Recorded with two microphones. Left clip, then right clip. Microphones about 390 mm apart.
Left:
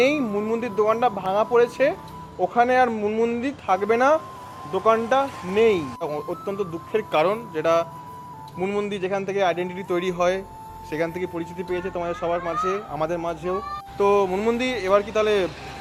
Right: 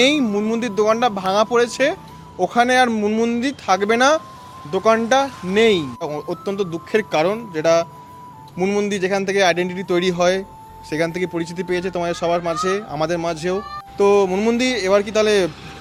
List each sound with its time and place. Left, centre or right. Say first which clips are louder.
0.0 s speech: right 4 dB; right
14.0 s speech: right 4 dB; right